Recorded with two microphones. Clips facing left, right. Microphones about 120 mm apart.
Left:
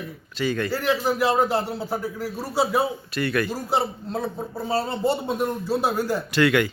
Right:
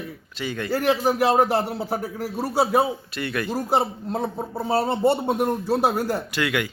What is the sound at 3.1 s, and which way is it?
Speech, 20° right (ahead or behind).